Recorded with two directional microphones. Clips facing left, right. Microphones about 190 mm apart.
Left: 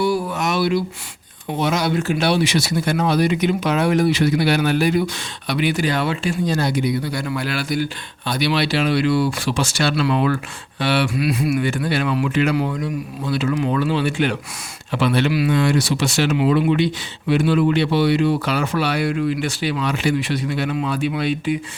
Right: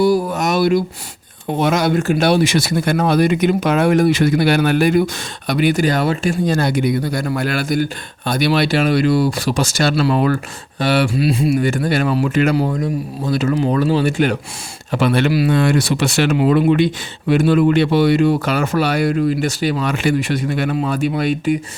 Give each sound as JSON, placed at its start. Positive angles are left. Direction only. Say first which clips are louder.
{"t": 0.0, "sound": "a sound", "louder": "right 5 dB", "side_deg": -40}
{"t": 1.5, "sound": "speech", "louder": "right 4 dB", "side_deg": -50}
{"t": 11.1, "sound": "speech", "louder": "right 4 dB", "side_deg": -30}
{"t": 11.6, "sound": "speech", "louder": "right 4 dB", "side_deg": -45}